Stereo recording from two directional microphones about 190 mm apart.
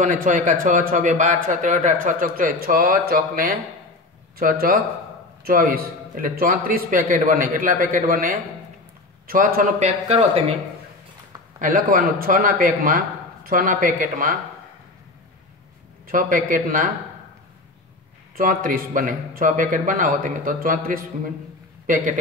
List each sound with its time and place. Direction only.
0.0 s a man's voice: 45° right (ahead or behind)
11.6 s a man's voice: 45° right (ahead or behind)
16.1 s a man's voice: 45° right (ahead or behind)
18.3 s a man's voice: 45° right (ahead or behind)